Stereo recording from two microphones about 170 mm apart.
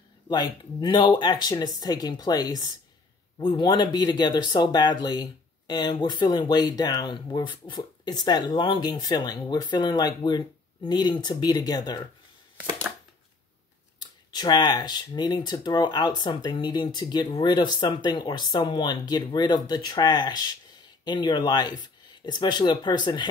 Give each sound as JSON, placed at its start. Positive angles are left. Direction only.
{"t": 0.3, "sound": "speech", "side_deg": 25}
{"t": 13.9, "sound": "speech", "side_deg": 25}